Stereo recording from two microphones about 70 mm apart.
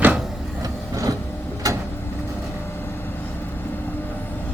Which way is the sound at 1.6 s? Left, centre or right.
Right.